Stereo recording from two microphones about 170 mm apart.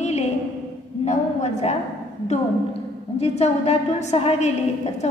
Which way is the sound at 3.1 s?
40° left (ahead or behind).